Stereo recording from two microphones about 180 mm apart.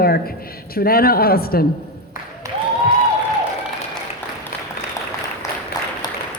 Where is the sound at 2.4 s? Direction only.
15° right (ahead or behind).